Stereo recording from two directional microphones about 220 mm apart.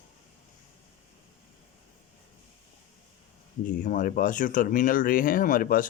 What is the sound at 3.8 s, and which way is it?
Speech, 35° left (ahead or behind).